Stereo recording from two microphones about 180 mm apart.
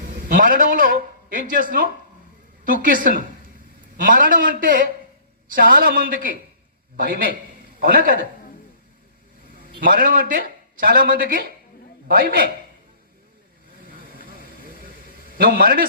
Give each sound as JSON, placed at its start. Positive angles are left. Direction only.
{"t": 0.3, "sound": "a man's voice", "side_deg": -50}
{"t": 9.8, "sound": "a man's voice", "side_deg": -50}
{"t": 14.1, "sound": "vehicle", "side_deg": -50}
{"t": 15.3, "sound": "a man's voice", "side_deg": -55}